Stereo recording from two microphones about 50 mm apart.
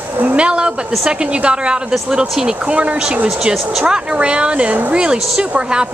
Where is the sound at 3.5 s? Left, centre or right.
Centre.